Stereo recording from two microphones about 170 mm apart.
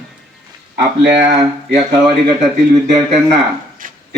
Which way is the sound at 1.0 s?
70° right (ahead or behind).